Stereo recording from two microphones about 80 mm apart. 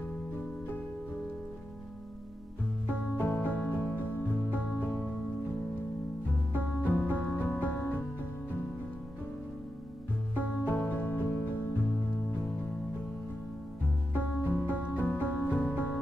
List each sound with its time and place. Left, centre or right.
2.9 s music: left
6.5 s music: left
10.3 s music: left
14.1 s music: left